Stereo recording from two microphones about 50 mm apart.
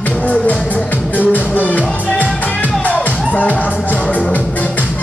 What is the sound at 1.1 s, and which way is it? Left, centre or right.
Music, left.